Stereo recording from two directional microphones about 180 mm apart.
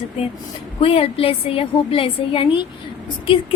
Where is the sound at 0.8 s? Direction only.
30° left (ahead or behind).